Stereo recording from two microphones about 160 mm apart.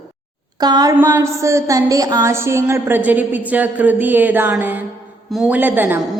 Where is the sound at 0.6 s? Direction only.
25° right (ahead or behind).